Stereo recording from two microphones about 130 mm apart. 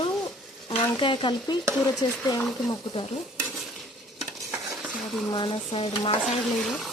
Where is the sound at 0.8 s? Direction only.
35° left (ahead or behind).